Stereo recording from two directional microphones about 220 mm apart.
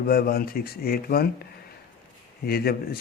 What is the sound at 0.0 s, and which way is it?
Speech, 45° left (ahead or behind).